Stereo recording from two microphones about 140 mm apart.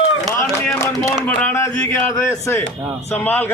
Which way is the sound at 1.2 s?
15° left (ahead or behind).